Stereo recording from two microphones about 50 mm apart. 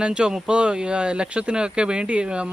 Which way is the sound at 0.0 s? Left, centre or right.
Centre.